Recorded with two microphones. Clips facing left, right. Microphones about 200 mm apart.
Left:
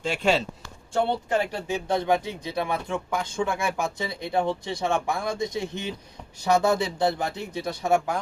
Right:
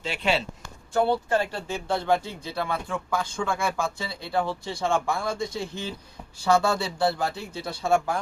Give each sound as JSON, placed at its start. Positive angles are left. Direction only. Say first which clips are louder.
{"t": 0.0, "sound": "speech", "louder": "left 3 dB", "side_deg": 45}
{"t": 0.9, "sound": "speech", "louder": "right 1 dB", "side_deg": 20}